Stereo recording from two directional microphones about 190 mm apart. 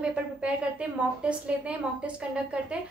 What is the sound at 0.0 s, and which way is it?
A woman's voice, 5° right (ahead or behind).